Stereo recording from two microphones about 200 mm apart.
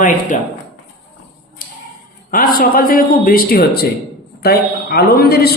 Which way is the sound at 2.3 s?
45° left (ahead or behind).